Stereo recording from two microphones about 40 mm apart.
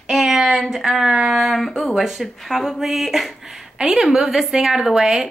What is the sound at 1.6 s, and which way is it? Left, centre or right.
Speech, centre.